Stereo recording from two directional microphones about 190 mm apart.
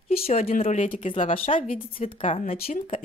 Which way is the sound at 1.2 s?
30° left (ahead or behind).